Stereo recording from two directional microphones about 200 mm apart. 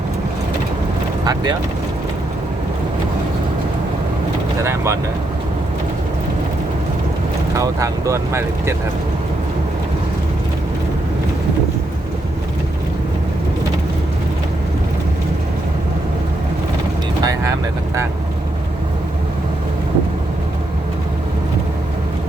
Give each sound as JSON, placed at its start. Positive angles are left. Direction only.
{"t": 1.2, "sound": "speech", "side_deg": -20}
{"t": 4.6, "sound": "speech", "side_deg": -15}
{"t": 7.5, "sound": "speech", "side_deg": -15}